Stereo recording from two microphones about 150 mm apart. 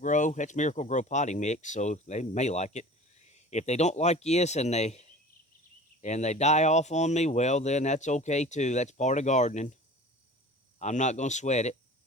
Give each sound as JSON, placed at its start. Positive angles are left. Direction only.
{"t": 0.0, "sound": "speech", "side_deg": 60}
{"t": 10.8, "sound": "speech", "side_deg": 50}